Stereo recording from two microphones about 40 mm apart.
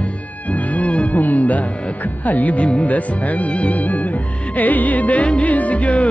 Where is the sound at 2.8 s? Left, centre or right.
Left.